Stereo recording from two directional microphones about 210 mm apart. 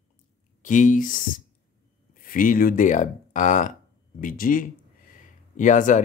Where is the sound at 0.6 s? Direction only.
35° left (ahead or behind).